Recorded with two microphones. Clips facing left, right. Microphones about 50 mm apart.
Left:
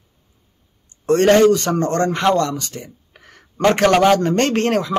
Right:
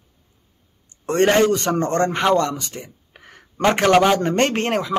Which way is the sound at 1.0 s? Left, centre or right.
Right.